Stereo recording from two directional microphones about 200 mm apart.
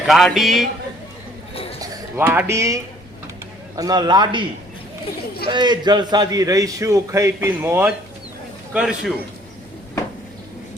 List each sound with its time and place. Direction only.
0.1 s a man's voice: centre (ahead or behind)
1.8 s a man's voice: 10° right (ahead or behind)
5.5 s a man's voice: 20° right (ahead or behind); by 9.1 s 5° right (ahead or behind)